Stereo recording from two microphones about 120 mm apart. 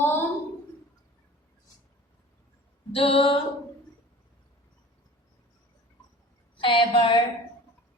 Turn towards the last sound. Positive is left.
turn(degrees=40)  # may be behind; listen again after turning